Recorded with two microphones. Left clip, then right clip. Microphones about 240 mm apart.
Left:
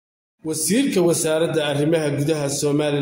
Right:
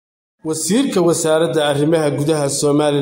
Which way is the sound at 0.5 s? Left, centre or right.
Centre.